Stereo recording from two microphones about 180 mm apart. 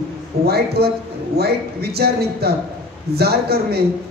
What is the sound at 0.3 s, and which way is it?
A man's voice, 55° right (ahead or behind).